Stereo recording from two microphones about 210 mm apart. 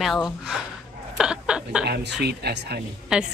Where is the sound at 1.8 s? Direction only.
50° right (ahead or behind).